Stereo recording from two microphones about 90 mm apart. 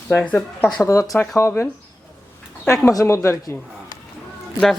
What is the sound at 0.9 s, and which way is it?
Speech, 35° left (ahead or behind).